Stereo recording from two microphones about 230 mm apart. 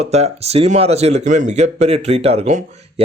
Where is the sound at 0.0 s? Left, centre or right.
Right.